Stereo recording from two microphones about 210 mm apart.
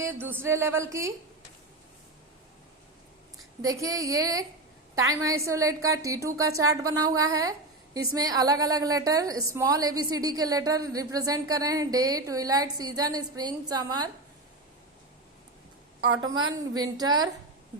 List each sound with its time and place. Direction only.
0.2 s a woman's voice: 10° right (ahead or behind)
3.6 s a woman's voice: 15° right (ahead or behind)
16.2 s a woman's voice: 20° right (ahead or behind)